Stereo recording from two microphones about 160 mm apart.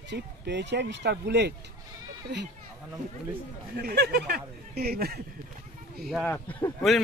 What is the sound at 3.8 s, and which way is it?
Speech, 85° right.